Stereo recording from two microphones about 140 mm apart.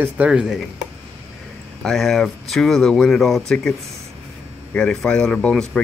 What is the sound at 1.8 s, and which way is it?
Speech, centre (ahead or behind).